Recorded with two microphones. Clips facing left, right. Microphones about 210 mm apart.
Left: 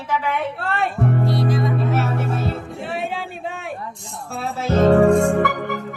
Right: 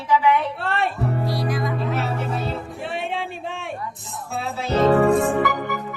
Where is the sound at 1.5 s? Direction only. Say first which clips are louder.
Left 4 dB; 25° left (ahead or behind).